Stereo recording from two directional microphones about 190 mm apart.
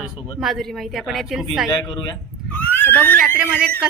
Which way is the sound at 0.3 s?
Centre (ahead or behind).